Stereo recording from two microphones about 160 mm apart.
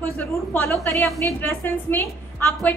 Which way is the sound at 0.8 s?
20° left (ahead or behind).